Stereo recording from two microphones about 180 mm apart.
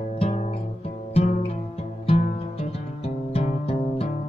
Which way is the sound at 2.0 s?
30° left (ahead or behind).